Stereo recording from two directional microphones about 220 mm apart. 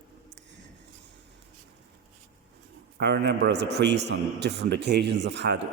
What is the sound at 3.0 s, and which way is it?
A man's voice, 50° right (ahead or behind).